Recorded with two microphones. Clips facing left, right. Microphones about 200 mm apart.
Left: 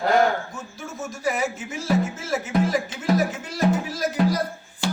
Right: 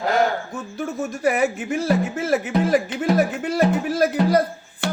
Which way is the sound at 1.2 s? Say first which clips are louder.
Right 5 dB; 60° right (ahead or behind).